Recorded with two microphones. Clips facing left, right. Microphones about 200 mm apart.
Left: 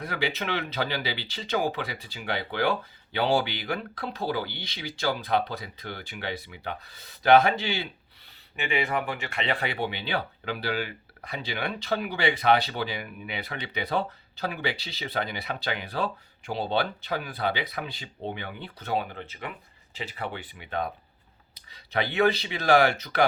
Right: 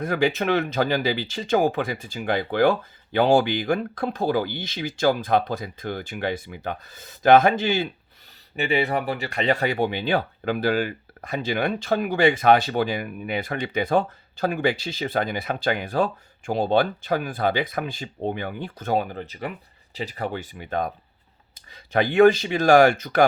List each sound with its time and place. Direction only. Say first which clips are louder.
0.0 s speech: right 8 dB; 45° right (ahead or behind)
8.5 s speech: right 5 dB; 35° right (ahead or behind)